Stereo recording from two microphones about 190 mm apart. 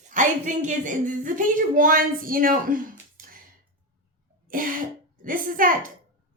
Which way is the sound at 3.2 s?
45° right (ahead or behind).